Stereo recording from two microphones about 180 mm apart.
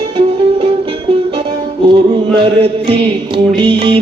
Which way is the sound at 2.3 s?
30° right (ahead or behind).